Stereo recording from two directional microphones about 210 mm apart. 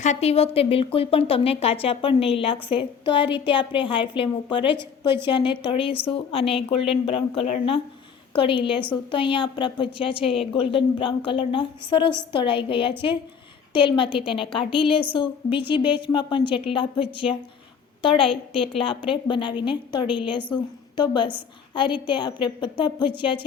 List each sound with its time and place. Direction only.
0.0 s a woman's voice: 30° left (ahead or behind)